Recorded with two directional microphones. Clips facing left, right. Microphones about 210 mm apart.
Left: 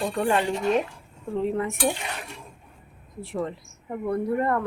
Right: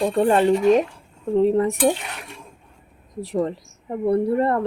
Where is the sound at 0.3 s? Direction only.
40° right (ahead or behind).